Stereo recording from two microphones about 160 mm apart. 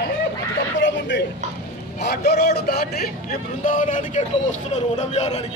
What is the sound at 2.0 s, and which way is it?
A man's voice, 90° left.